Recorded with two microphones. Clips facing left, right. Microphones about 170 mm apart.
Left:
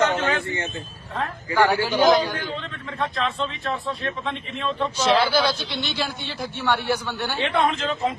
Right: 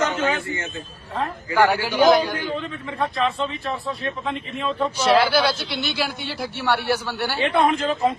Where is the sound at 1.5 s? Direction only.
15° right (ahead or behind).